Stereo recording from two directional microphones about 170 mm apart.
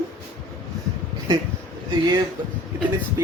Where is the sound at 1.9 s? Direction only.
25° right (ahead or behind).